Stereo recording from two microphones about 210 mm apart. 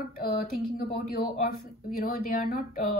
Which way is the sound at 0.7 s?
45° left (ahead or behind).